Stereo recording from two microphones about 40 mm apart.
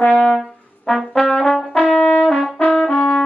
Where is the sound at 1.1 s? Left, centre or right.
Centre.